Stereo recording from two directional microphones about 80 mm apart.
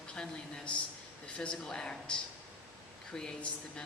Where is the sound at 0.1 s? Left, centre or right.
Centre.